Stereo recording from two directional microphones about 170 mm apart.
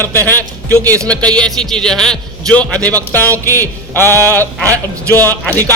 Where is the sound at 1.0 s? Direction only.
5° left (ahead or behind).